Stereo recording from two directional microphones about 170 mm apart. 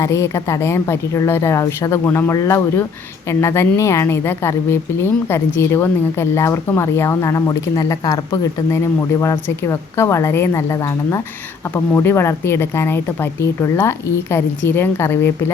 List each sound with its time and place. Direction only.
0.0 s speech: 15° left (ahead or behind)